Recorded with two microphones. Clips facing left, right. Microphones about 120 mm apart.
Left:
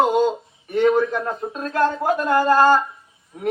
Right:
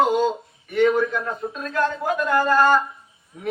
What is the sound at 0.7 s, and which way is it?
A man's voice, 40° left (ahead or behind).